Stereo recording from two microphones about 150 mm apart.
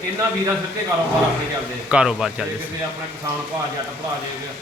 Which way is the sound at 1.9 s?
5° right (ahead or behind).